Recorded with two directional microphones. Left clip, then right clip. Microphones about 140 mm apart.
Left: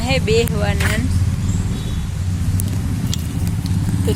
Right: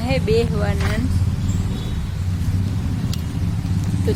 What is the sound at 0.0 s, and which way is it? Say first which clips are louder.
Speech: left 2 dB; 10° right (ahead or behind).